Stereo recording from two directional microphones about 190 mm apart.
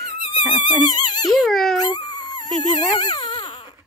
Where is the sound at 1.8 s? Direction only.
20° left (ahead or behind).